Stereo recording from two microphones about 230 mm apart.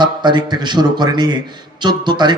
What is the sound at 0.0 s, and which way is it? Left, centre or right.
A man's voice, centre.